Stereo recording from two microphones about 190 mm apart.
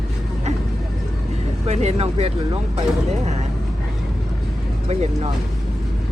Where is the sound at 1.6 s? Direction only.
35° right (ahead or behind).